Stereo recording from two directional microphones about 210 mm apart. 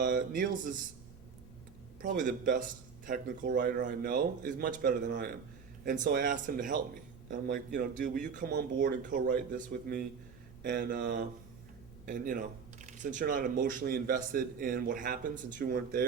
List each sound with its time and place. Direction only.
0.0 s speech: 40° right (ahead or behind)
2.0 s speech: 40° right (ahead or behind)